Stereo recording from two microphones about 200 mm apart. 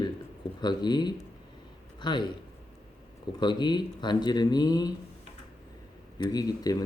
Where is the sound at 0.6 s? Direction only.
20° left (ahead or behind).